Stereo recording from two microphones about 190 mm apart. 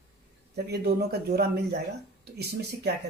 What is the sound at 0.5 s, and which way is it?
Speech, 55° right (ahead or behind).